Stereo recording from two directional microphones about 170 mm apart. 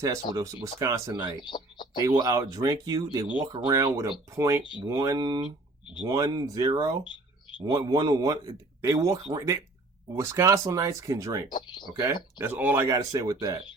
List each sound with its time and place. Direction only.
0.3 s speech: 20° right (ahead or behind)
1.4 s speech: 25° left (ahead or behind)
2.0 s speech: 20° right (ahead or behind)
7.0 s a sound: 30° left (ahead or behind)
7.6 s speech: 20° right (ahead or behind)
11.4 s speech: 25° left (ahead or behind)
12.4 s speech: 10° right (ahead or behind)